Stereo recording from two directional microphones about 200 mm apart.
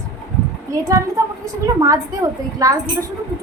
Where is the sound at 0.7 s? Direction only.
15° right (ahead or behind).